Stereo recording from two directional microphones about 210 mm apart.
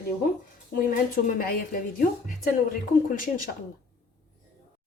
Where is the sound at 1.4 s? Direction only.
45° left (ahead or behind).